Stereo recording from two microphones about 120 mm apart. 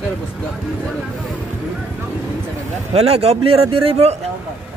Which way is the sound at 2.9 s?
60° right (ahead or behind).